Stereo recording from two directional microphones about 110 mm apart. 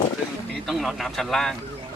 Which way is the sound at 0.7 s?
Centre (ahead or behind).